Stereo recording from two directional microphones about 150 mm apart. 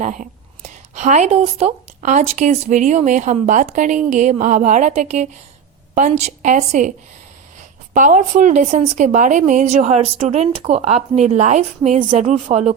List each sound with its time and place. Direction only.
0.0 s speech: 55° right (ahead or behind)
7.9 s speech: 55° right (ahead or behind)